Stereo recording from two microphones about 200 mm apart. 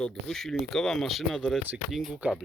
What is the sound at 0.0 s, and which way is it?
Speech, centre (ahead or behind).